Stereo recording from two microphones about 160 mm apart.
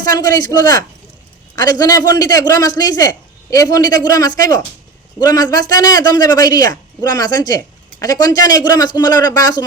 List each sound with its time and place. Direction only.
0.0 s a man's voice: 25° left (ahead or behind)